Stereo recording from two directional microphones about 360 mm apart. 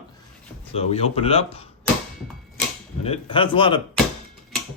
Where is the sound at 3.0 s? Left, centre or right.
Centre.